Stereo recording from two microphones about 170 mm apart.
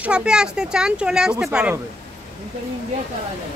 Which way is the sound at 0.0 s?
5° right (ahead or behind).